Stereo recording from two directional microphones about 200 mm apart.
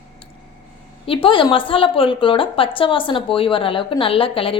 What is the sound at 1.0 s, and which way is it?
A woman's voice, 25° left (ahead or behind).